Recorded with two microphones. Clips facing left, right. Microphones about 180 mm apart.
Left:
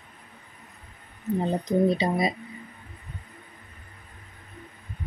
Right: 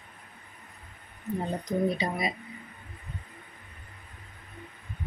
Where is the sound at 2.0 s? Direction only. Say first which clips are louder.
Left 6 dB; 35° left (ahead or behind).